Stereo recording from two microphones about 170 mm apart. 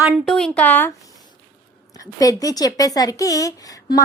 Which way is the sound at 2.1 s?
20° left (ahead or behind).